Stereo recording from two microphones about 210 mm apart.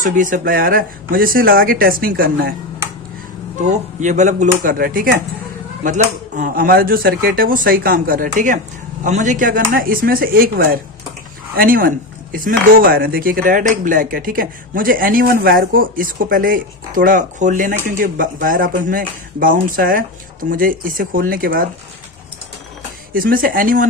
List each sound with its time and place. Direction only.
0.0 s speech: 40° right (ahead or behind)
3.6 s speech: 35° right (ahead or behind)
23.1 s speech: 40° right (ahead or behind)